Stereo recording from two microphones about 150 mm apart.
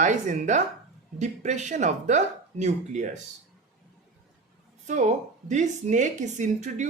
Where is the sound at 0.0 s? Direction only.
55° right (ahead or behind).